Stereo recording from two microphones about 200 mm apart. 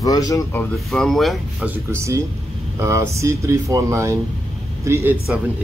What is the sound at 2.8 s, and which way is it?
Speech, 15° right (ahead or behind).